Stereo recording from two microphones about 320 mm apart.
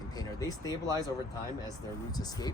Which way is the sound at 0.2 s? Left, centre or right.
Centre.